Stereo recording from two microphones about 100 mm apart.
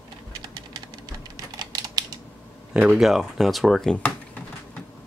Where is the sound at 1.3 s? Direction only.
40° right (ahead or behind).